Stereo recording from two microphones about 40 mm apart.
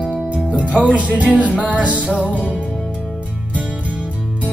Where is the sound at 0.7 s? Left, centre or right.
Right.